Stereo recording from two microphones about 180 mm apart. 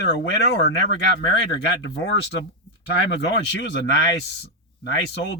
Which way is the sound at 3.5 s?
70° left (ahead or behind).